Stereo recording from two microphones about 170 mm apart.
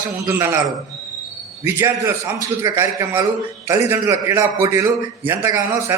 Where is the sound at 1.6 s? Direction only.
15° right (ahead or behind).